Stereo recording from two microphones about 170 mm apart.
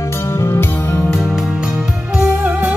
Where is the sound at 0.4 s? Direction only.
15° left (ahead or behind).